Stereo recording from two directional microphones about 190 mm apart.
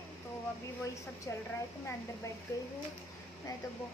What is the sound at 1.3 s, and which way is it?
Speech, 15° left (ahead or behind).